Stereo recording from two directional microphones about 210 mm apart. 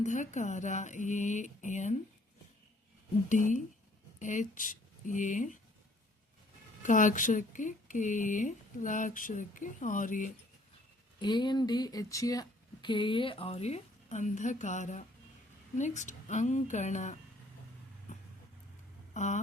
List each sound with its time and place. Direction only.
0.0 s speech: 35° left (ahead or behind)
3.2 s speech: 35° left (ahead or behind)
6.8 s speech: 40° left (ahead or behind)
11.2 s speech: 20° left (ahead or behind)
19.1 s a sound: 35° left (ahead or behind)